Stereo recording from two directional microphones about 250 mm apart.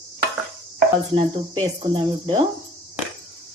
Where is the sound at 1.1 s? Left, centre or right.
Centre.